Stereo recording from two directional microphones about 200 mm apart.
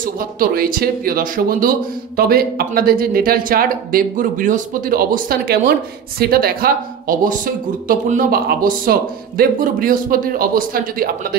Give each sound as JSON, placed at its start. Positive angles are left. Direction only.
{"t": 0.0, "sound": "speech", "side_deg": -45}